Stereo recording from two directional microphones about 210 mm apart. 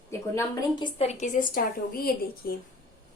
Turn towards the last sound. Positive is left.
turn(degrees=45)  # may be behind; listen again after turning